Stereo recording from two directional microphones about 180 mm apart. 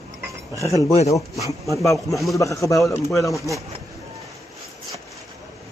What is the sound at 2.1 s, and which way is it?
Speech, centre (ahead or behind).